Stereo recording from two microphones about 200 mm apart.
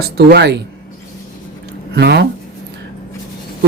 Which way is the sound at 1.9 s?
55° right (ahead or behind).